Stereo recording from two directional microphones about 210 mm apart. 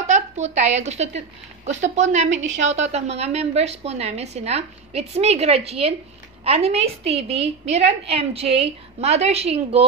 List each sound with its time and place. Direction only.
0.0 s a woman's voice: 35° right (ahead or behind)